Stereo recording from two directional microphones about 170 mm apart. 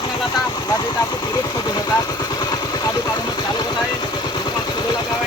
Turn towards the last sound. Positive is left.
turn(degrees=25)  # may be behind; listen again after turning